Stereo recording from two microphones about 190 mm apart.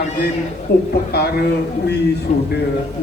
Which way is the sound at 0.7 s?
55° left (ahead or behind).